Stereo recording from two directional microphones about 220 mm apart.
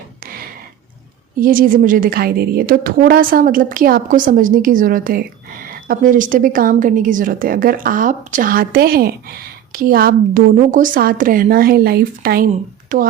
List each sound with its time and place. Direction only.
1.4 s a woman's voice: 40° right (ahead or behind)